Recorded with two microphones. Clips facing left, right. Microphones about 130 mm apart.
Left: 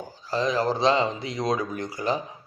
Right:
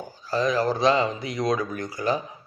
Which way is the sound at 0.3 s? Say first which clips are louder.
Right 1 dB; 25° left (ahead or behind).